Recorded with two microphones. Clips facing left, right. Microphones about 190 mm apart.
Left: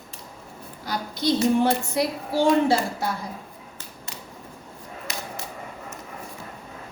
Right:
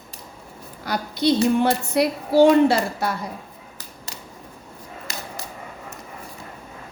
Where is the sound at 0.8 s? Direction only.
65° right (ahead or behind).